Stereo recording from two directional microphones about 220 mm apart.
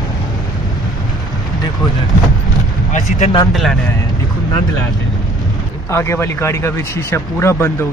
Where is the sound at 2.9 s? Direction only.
35° left (ahead or behind).